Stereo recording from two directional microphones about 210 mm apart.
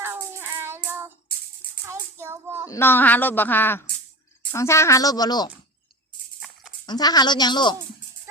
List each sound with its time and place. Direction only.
0.0 s cat: 10° right (ahead or behind)
1.9 s child singing: 10° right (ahead or behind)
2.6 s speech: 10° left (ahead or behind)
6.4 s a sound: 5° right (ahead or behind)
6.8 s a woman's voice: 20° left (ahead or behind)